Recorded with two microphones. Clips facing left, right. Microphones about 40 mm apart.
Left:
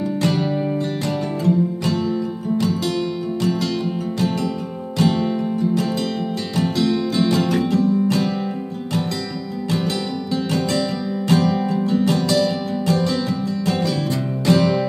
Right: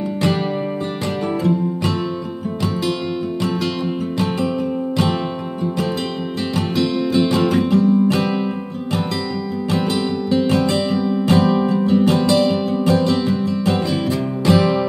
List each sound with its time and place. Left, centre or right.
1.4 s music: right
4.9 s music: right
10.3 s music: right
14.4 s music: centre